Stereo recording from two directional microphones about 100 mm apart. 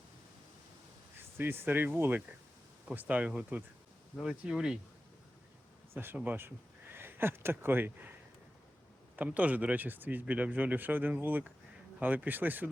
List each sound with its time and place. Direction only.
1.2 s speech: 20° right (ahead or behind); by 4.8 s 5° right (ahead or behind)
5.9 s speech: 20° right (ahead or behind)
9.1 s speech: 15° right (ahead or behind)